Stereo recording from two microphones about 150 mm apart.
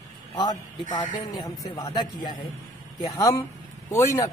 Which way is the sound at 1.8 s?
30° left (ahead or behind).